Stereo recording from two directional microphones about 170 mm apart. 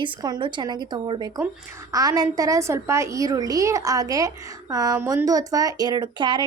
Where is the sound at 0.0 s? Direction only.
25° right (ahead or behind).